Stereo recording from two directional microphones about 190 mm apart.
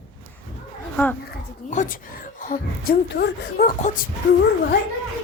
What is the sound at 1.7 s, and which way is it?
Speech, 40° left (ahead or behind).